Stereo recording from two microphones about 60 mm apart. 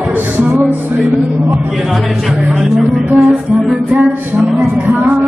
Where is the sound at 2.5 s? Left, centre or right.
Centre.